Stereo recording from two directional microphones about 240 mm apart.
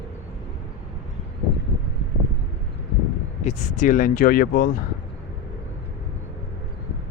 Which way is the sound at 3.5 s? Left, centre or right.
Left.